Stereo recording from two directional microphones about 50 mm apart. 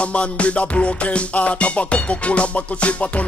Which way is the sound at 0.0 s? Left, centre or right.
Left.